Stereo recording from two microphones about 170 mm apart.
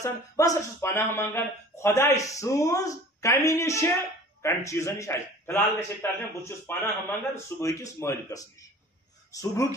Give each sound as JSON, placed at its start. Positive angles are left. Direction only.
{"t": 0.0, "sound": "speech", "side_deg": 20}